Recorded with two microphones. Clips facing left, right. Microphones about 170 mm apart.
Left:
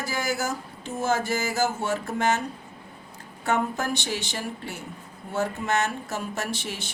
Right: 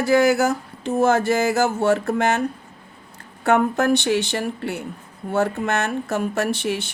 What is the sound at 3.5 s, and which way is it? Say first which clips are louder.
Speech: right 8 dB; 65° right (ahead or behind).